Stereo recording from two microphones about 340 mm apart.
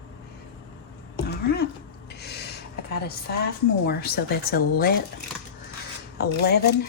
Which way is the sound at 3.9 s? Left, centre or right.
Left.